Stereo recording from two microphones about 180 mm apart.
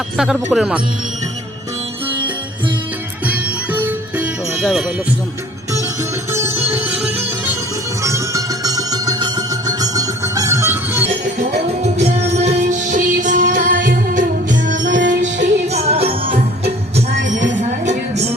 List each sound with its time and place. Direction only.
0.5 s speech: centre (ahead or behind)
3.2 s music: 10° right (ahead or behind)
6.3 s music: 15° right (ahead or behind)
12.5 s music: 45° right (ahead or behind)
14.8 s music: 90° right
15.7 s jingle bell: 35° right (ahead or behind)
16.9 s music: 45° right (ahead or behind)